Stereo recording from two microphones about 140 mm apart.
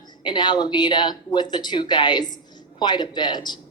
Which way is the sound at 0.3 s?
30° left (ahead or behind).